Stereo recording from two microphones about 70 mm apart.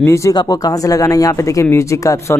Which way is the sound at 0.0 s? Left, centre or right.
Left.